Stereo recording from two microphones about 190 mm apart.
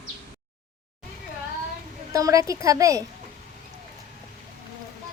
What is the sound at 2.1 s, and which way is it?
Speech, 15° right (ahead or behind).